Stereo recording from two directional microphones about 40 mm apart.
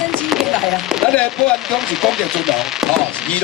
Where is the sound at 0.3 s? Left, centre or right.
Centre.